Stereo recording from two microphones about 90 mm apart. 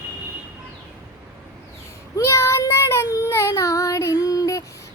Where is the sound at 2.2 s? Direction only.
30° left (ahead or behind).